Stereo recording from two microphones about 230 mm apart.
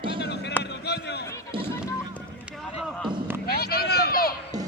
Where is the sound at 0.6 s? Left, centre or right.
Left.